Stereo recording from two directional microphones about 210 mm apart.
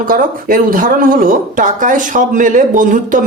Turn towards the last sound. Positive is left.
turn(degrees=-40)  # may be behind; listen again after turning